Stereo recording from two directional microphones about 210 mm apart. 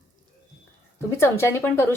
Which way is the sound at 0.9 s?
10° left (ahead or behind).